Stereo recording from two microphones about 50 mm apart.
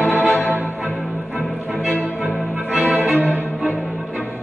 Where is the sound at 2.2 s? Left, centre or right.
Right.